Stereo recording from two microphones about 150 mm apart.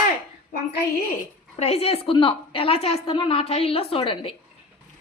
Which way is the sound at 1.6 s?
45° left (ahead or behind).